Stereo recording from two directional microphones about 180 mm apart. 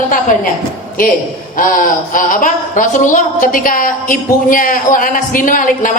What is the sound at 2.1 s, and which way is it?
A woman's voice, 50° left (ahead or behind).